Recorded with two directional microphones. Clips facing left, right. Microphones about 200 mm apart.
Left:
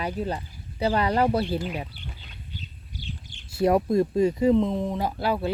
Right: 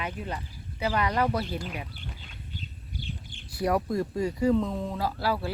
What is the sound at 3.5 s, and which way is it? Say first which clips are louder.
Speech: left 6 dB; 25° left (ahead or behind).